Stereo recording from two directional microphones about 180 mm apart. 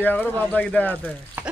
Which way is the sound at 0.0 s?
10° left (ahead or behind).